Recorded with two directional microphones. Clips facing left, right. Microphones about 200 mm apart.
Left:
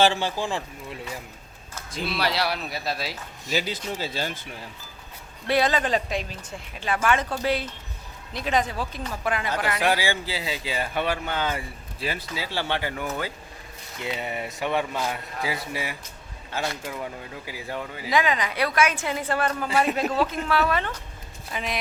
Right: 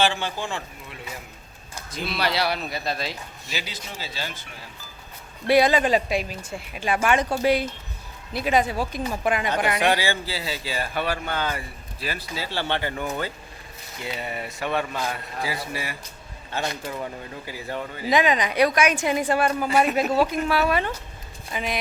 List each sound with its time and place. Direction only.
0.0 s speech: 40° left (ahead or behind)
2.0 s speech: centre (ahead or behind)
3.4 s speech: 45° left (ahead or behind)
5.5 s a woman's voice: 10° right (ahead or behind)
9.8 s a man's voice: 10° left (ahead or behind)
12.3 s speech: 15° left (ahead or behind)
14.2 s a man's voice: 15° left (ahead or behind)
17.4 s speech: 10° left (ahead or behind)
18.1 s a woman's voice: 20° right (ahead or behind); by 21.8 s centre (ahead or behind)